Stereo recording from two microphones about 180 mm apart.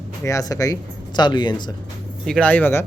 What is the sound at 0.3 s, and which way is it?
Speech, 20° left (ahead or behind).